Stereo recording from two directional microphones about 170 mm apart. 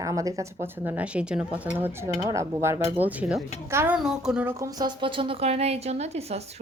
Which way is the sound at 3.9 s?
5° right (ahead or behind).